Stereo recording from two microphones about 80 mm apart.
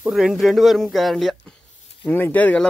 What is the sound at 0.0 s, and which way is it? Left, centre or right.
Speech, centre.